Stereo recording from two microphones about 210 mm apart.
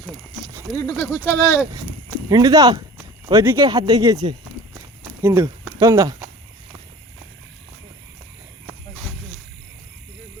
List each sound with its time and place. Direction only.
0.0 s a sound: 15° right (ahead or behind)
0.7 s speech: 15° left (ahead or behind)
2.3 s speech: 15° right (ahead or behind)